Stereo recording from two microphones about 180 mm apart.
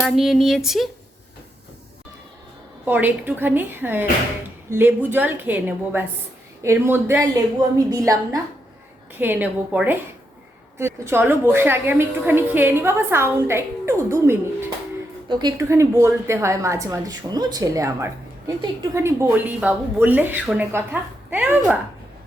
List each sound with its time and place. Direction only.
0.0 s speech: centre (ahead or behind)
2.8 s a woman's voice: 10° right (ahead or behind)